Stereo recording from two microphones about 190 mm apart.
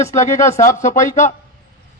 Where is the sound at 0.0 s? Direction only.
15° left (ahead or behind).